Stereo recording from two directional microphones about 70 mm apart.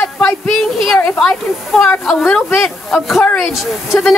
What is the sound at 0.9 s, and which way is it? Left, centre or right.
Speech, left.